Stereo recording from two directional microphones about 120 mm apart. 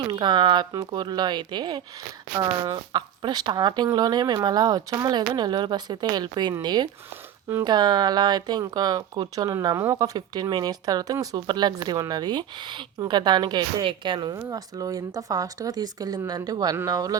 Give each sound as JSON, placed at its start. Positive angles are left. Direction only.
{"t": 0.1, "sound": "speech", "side_deg": -40}